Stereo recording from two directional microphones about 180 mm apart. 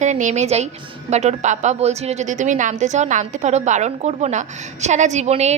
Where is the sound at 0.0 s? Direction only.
40° right (ahead or behind).